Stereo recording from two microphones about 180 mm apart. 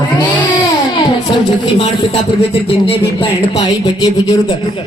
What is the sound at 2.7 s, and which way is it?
A man's voice, 30° left (ahead or behind).